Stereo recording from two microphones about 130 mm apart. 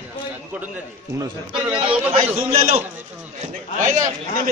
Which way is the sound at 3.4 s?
75° right (ahead or behind).